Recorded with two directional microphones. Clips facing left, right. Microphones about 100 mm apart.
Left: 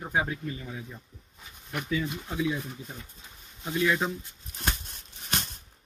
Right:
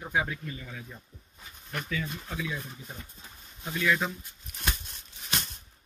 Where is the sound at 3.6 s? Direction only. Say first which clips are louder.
Left 2 dB; 20° left (ahead or behind).